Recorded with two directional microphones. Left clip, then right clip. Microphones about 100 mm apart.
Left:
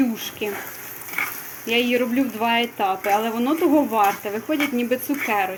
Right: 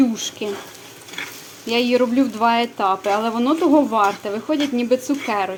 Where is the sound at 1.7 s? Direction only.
25° right (ahead or behind).